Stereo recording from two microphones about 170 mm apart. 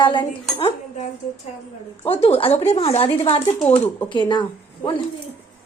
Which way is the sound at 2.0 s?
35° left (ahead or behind).